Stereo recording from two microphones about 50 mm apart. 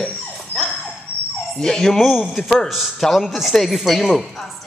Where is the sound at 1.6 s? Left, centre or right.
Centre.